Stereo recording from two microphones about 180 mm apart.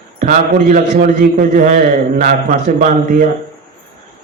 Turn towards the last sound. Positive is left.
turn(degrees=-45)  # may be behind; listen again after turning